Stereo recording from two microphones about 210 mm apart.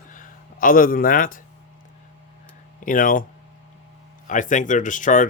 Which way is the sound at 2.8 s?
40° left (ahead or behind).